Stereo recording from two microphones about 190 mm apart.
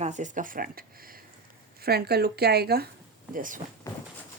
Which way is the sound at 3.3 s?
45° right (ahead or behind).